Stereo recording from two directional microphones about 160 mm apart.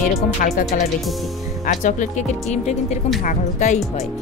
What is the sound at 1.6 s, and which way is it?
Speech, 55° left (ahead or behind).